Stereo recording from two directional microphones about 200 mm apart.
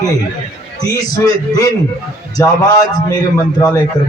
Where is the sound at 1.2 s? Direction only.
15° left (ahead or behind).